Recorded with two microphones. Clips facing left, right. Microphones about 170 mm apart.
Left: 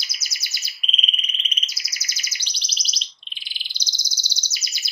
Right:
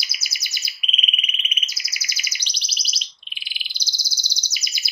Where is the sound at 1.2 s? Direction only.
10° right (ahead or behind).